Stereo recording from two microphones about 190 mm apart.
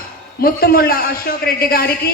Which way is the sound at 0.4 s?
50° left (ahead or behind).